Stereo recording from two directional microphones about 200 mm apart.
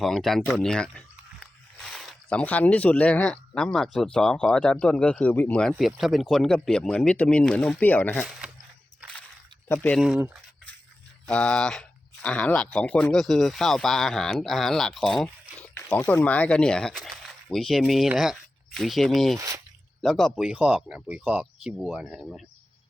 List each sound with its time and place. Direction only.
0.0 s speech: centre (ahead or behind)
9.0 s a sound: 5° left (ahead or behind)
9.6 s speech: 10° left (ahead or behind)
10.0 s speech: 5° right (ahead or behind)
11.3 s speech: 5° left (ahead or behind)
19.4 s speech: 15° right (ahead or behind)
20.0 s speech: centre (ahead or behind)